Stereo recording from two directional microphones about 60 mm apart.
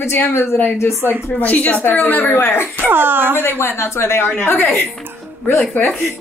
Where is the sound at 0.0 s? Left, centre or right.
Left.